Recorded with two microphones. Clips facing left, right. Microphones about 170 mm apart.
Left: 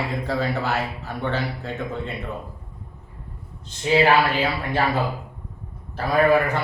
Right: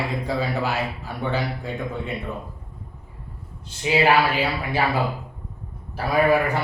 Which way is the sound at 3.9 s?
10° right (ahead or behind).